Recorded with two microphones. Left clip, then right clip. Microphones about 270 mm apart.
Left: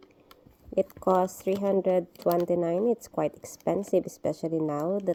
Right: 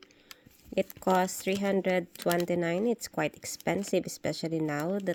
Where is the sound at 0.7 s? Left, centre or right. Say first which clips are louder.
Left 3 dB; right.